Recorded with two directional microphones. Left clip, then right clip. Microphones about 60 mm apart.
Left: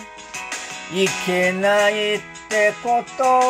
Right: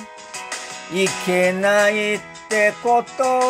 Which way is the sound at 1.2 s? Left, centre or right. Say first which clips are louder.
Right 2 dB; right.